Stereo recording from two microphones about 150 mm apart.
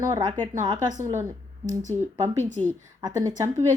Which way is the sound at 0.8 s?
55° right (ahead or behind).